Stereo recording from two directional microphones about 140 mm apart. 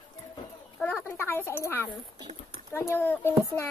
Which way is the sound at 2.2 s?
30° right (ahead or behind).